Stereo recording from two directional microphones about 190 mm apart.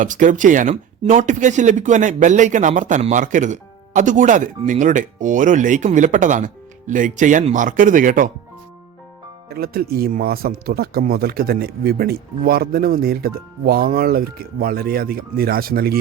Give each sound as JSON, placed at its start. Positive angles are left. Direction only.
{"t": 0.0, "sound": "speech", "side_deg": -45}
{"t": 9.5, "sound": "speech", "side_deg": -55}